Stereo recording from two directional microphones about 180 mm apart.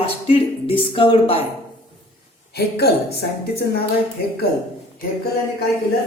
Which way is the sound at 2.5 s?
65° left (ahead or behind).